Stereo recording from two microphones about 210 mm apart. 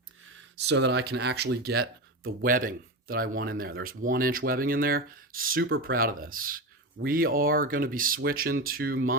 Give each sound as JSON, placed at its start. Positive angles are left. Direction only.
{"t": 0.5, "sound": "speech", "side_deg": -55}